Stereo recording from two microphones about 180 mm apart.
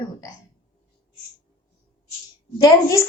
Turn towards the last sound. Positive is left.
turn(degrees=15)  # may be behind; listen again after turning